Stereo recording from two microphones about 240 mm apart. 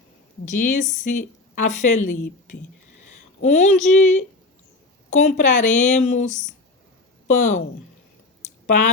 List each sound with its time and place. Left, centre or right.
0.4 s a woman's voice: left
3.4 s a woman's voice: left
8.4 s a sound: left